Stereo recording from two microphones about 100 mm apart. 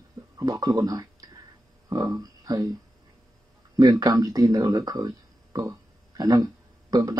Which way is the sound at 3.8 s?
40° right (ahead or behind).